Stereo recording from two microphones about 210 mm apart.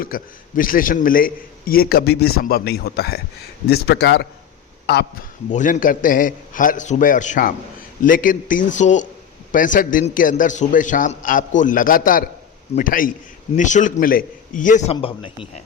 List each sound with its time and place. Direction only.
0.0 s a man's voice: 40° left (ahead or behind)
5.5 s a man's voice: 35° left (ahead or behind)
14.9 s a man's voice: 25° left (ahead or behind)